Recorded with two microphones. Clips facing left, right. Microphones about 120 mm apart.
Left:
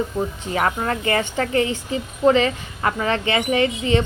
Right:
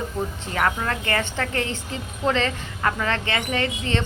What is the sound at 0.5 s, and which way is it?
A woman's voice, 20° left (ahead or behind).